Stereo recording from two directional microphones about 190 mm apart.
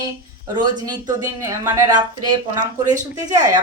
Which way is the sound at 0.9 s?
20° right (ahead or behind).